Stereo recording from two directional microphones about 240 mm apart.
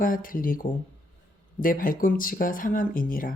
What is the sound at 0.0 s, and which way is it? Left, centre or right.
Speech, left.